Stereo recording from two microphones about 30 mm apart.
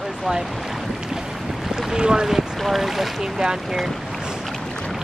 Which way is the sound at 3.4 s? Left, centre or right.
Right.